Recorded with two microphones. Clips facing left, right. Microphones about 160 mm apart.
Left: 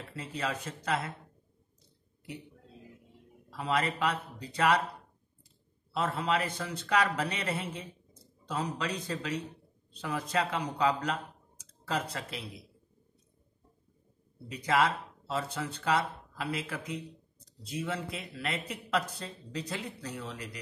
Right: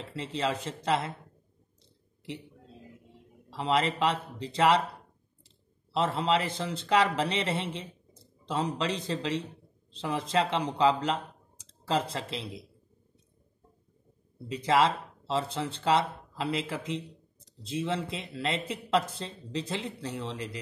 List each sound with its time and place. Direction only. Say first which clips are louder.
0.1 s speech: right 4 dB; 25° right (ahead or behind)
3.4 s speech: right 3 dB; 25° right (ahead or behind)
5.9 s speech: right 3 dB; 25° right (ahead or behind)
14.5 s speech: right 3 dB; 30° right (ahead or behind)